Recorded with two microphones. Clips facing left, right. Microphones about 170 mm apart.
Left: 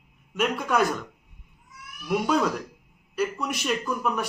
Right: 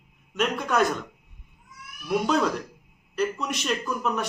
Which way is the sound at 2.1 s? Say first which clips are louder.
Even; 5° left (ahead or behind).